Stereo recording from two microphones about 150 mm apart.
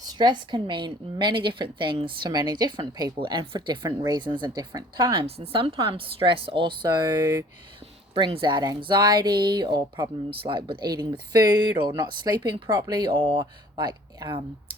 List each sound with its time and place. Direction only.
0.0 s a woman's voice: 25° right (ahead or behind)
5.2 s a woman's voice: 40° right (ahead or behind); by 7.4 s 15° right (ahead or behind)
8.1 s a woman's voice: 35° right (ahead or behind)